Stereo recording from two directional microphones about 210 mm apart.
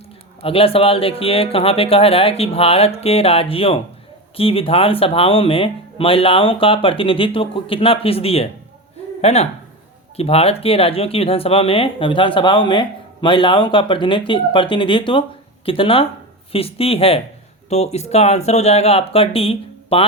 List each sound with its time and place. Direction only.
0.4 s speech: 25° left (ahead or behind)